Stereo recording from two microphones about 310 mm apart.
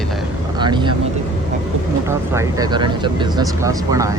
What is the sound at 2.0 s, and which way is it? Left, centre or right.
Speech, centre.